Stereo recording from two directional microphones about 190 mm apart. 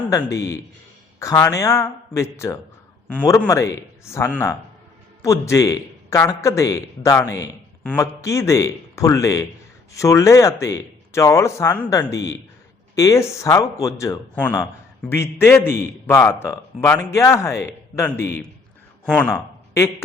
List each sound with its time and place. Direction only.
0.1 s a man's voice: 15° left (ahead or behind)